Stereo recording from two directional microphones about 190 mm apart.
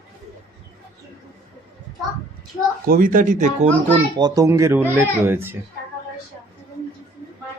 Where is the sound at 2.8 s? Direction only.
50° right (ahead or behind).